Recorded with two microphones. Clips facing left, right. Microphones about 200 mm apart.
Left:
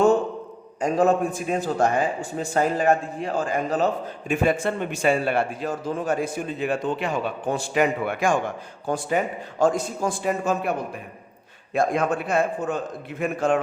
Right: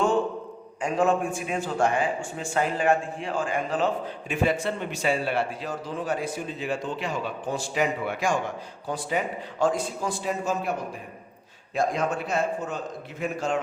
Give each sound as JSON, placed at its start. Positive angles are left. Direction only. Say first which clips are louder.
{"t": 0.8, "sound": "a man's voice", "louder": "left 4 dB", "side_deg": 40}